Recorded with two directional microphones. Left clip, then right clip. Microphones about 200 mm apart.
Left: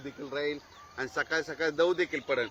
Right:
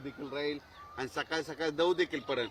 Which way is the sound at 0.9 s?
60° right (ahead or behind).